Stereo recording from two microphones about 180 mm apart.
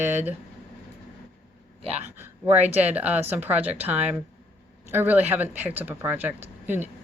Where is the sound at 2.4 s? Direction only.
10° right (ahead or behind).